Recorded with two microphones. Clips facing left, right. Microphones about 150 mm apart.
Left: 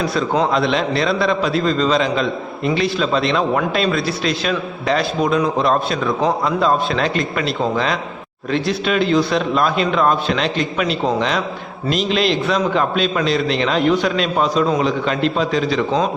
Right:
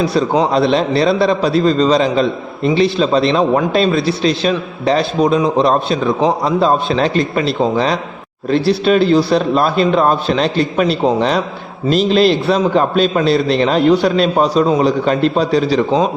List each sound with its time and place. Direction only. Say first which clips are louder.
0.5 s a man's voice: right 4 dB; 35° right (ahead or behind)
8.4 s a man's voice: right 6 dB; 35° right (ahead or behind)